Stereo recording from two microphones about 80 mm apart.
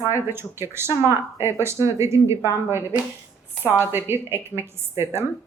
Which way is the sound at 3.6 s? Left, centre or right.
Right.